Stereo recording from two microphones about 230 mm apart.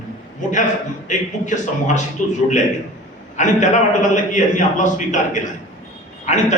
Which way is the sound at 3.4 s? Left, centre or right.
Left.